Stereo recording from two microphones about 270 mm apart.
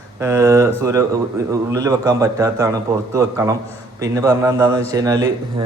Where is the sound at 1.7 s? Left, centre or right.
Centre.